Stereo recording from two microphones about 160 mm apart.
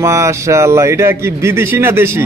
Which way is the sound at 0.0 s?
20° right (ahead or behind).